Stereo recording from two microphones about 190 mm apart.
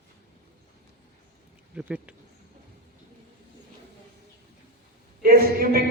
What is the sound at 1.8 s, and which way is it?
Speech, 5° right (ahead or behind).